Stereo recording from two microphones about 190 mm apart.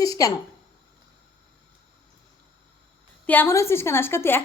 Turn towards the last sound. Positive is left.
turn(degrees=10)  # may be behind; listen again after turning